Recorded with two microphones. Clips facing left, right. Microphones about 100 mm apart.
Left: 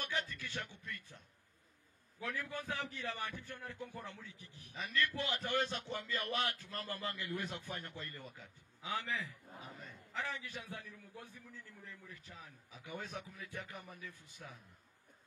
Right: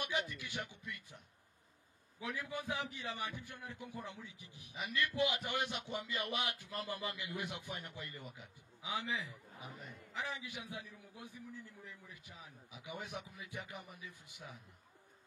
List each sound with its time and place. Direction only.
0.0 s a man's voice: 15° right (ahead or behind)